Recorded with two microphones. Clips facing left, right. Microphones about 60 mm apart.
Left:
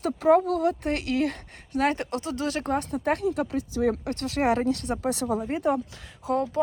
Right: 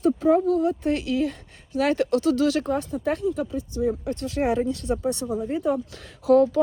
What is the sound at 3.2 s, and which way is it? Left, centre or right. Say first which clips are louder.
Speech: even; left.